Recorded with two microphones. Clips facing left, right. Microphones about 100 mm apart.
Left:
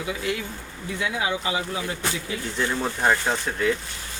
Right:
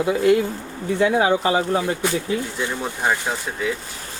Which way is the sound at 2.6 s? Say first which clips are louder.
Even; 5° right (ahead or behind).